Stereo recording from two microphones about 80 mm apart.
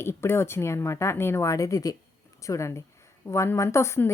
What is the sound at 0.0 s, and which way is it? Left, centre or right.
A woman's voice, left.